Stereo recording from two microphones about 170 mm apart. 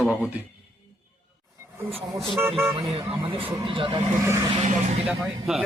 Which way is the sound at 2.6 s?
15° right (ahead or behind).